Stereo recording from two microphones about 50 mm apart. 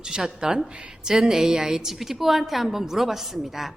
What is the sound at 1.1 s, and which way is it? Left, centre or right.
A woman's voice, centre.